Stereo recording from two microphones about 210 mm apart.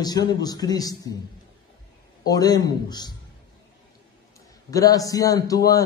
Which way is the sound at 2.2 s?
20° left (ahead or behind).